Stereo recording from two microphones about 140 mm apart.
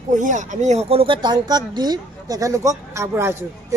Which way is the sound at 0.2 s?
60° right (ahead or behind).